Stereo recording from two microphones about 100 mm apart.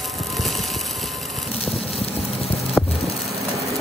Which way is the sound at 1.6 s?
85° left.